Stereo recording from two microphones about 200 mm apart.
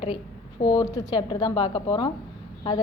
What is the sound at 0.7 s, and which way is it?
A woman's voice, 15° left (ahead or behind).